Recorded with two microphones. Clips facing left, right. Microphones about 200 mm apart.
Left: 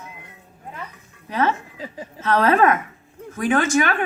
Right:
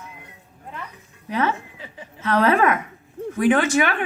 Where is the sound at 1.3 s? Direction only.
40° left (ahead or behind).